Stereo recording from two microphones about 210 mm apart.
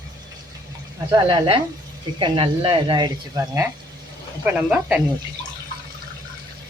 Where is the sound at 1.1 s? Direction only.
20° right (ahead or behind).